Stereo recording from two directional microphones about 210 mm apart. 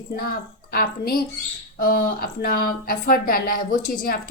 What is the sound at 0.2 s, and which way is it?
A woman's voice, 45° left (ahead or behind).